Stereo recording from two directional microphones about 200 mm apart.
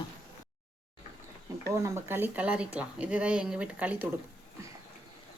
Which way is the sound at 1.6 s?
10° right (ahead or behind).